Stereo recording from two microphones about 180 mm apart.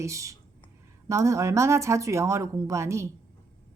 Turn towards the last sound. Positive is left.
turn(degrees=-15)  # may be behind; listen again after turning